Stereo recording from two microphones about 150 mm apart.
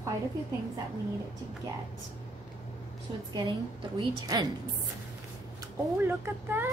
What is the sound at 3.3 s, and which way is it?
A woman's voice, 30° right (ahead or behind).